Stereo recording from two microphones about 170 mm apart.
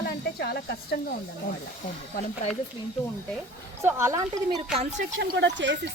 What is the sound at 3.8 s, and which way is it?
Speech, 15° right (ahead or behind).